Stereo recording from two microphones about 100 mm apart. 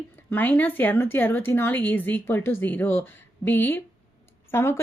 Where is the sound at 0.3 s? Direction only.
15° left (ahead or behind).